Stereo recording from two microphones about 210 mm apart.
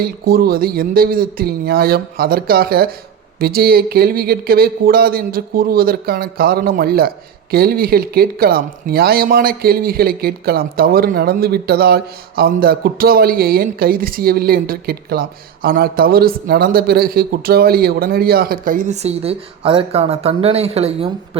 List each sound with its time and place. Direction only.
0.0 s speech: 45° right (ahead or behind); by 21.1 s 30° right (ahead or behind)